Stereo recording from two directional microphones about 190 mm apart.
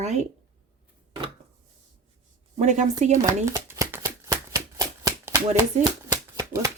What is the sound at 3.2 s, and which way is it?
Shuffling cards, 15° right (ahead or behind).